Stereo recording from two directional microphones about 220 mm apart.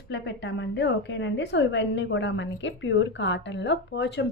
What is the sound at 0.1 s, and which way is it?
A woman's voice, 50° left (ahead or behind).